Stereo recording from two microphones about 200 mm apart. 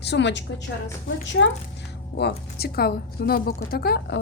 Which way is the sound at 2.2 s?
55° left (ahead or behind).